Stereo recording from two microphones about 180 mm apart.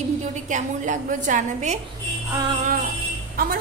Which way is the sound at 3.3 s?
55° right (ahead or behind).